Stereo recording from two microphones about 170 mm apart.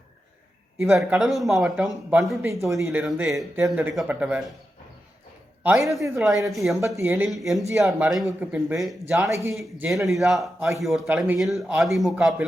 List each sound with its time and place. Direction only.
0.8 s a man's voice: 5° right (ahead or behind)
2.4 s speech: 20° right (ahead or behind)
3.0 s a man's voice: centre (ahead or behind)
5.6 s a man's voice: centre (ahead or behind)
6.7 s speech: 15° right (ahead or behind)
7.3 s a man's voice: centre (ahead or behind)
8.4 s speech: 15° right (ahead or behind)
10.2 s a man's voice: centre (ahead or behind)